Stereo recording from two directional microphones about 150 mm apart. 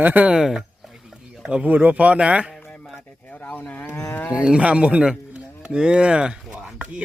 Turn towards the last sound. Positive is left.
turn(degrees=-5)  # may be behind; listen again after turning